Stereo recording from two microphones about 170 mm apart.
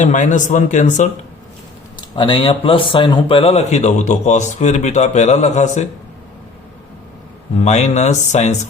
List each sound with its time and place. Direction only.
0.0 s speech: 45° left (ahead or behind)
2.1 s speech: 30° left (ahead or behind)
7.6 s speech: 40° left (ahead or behind)